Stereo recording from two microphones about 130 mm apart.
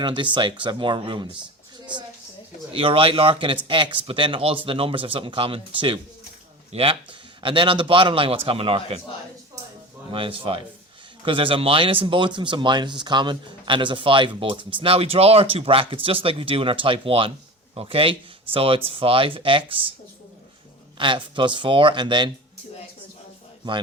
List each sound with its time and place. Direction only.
0.0 s speech: 40° right (ahead or behind)
2.7 s a man's voice: 45° right (ahead or behind)
10.1 s speech: 40° right (ahead or behind)
21.0 s speech: 40° right (ahead or behind)